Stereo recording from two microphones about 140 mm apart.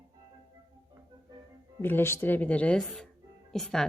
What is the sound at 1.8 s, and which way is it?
Speech, 15° left (ahead or behind).